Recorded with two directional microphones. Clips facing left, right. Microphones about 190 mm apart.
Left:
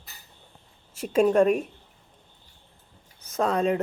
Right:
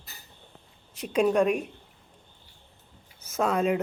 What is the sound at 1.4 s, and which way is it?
Speech, 45° left (ahead or behind).